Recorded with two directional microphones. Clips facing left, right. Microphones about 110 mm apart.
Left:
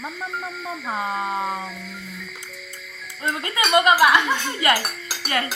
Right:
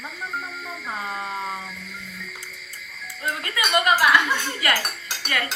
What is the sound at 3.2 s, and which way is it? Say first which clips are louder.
Speech: left 3 dB; 25° left (ahead or behind).